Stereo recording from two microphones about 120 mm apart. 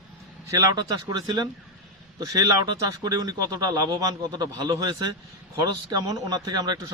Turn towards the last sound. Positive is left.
turn(degrees=-30)  # may be behind; listen again after turning